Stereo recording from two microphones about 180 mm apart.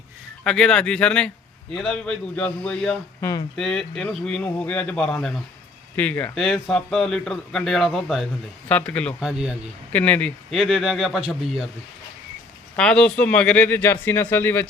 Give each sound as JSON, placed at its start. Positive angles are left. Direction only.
{"t": 0.4, "sound": "a man's voice", "side_deg": 5}
{"t": 3.2, "sound": "speech", "side_deg": 20}
{"t": 3.5, "sound": "a man's voice", "side_deg": 5}
{"t": 9.2, "sound": "a man's voice", "side_deg": -5}
{"t": 9.9, "sound": "a man's voice", "side_deg": 5}
{"t": 12.7, "sound": "speech", "side_deg": 5}